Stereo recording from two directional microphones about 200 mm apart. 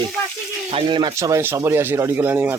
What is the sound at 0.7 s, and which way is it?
Speech, 25° right (ahead or behind).